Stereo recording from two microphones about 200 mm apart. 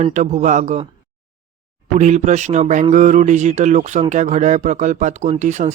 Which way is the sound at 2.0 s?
35° right (ahead or behind).